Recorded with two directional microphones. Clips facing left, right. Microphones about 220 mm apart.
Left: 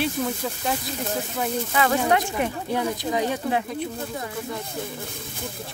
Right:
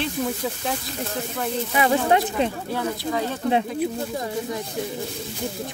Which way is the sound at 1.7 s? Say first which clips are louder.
Right 2 dB; 20° right (ahead or behind).